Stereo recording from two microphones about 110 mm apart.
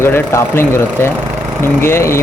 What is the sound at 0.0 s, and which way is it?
Speech, 25° left (ahead or behind).